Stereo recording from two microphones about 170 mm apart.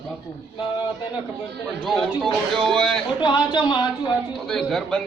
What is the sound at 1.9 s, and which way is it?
Speech, centre (ahead or behind).